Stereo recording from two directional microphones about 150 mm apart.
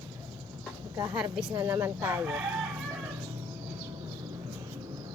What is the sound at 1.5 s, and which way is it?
Speech, 20° right (ahead or behind).